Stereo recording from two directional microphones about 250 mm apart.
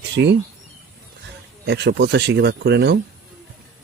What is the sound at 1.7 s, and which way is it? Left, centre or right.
Speech, right.